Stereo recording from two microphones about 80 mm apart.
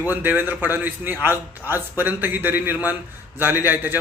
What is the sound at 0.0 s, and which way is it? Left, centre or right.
A man's voice, right.